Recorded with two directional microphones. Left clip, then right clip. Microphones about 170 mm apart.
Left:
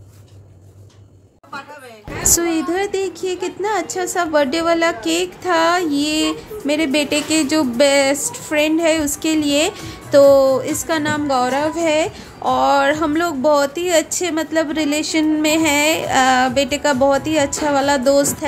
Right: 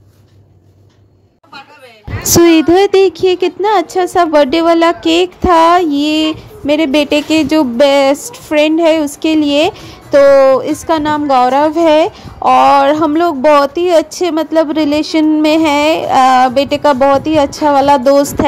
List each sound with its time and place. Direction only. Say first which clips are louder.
2.2 s a woman's voice: right 11 dB; 40° right (ahead or behind)